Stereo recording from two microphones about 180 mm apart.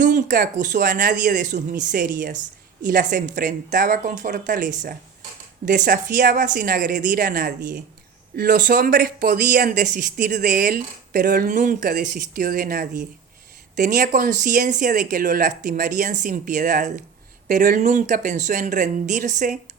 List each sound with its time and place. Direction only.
0.0 s speech: 45° right (ahead or behind)